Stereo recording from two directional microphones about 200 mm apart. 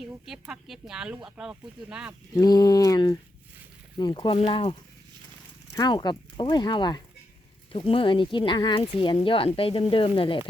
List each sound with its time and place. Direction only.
0.0 s speech: 5° right (ahead or behind)
2.3 s speech: 20° left (ahead or behind)